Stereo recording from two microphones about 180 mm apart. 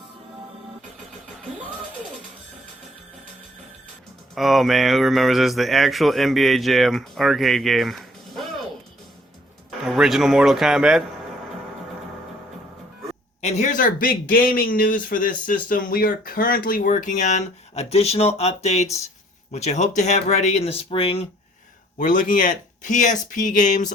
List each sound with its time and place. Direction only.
4.4 s speech: centre (ahead or behind)
9.8 s speech: centre (ahead or behind)
13.4 s speech: 40° left (ahead or behind)
21.9 s speech: 45° left (ahead or behind)